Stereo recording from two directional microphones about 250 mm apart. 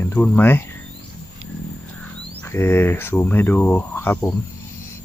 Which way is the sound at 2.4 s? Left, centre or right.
Centre.